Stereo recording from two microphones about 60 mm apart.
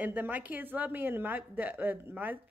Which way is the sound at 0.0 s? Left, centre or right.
Right.